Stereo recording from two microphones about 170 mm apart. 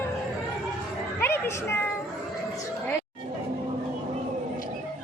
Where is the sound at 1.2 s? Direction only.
15° left (ahead or behind).